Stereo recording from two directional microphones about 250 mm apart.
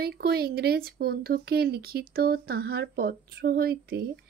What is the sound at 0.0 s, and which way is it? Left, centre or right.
A woman's voice, right.